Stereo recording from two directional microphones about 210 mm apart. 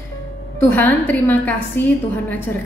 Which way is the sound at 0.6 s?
10° left (ahead or behind).